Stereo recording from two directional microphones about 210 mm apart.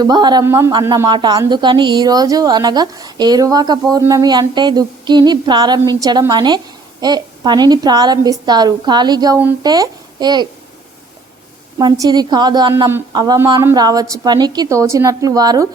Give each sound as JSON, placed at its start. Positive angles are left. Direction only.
{"t": 0.0, "sound": "speech", "side_deg": -20}
{"t": 11.8, "sound": "speech", "side_deg": -20}